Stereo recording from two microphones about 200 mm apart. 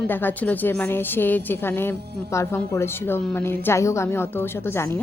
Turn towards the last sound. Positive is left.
turn(degrees=10)  # may be behind; listen again after turning